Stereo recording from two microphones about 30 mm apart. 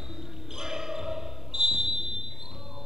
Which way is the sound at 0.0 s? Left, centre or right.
Centre.